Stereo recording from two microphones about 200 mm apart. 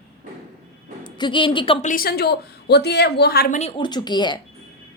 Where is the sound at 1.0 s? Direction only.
25° left (ahead or behind); by 3.5 s 50° left (ahead or behind).